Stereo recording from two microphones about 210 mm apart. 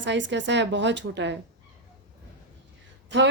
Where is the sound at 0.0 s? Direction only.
60° right (ahead or behind).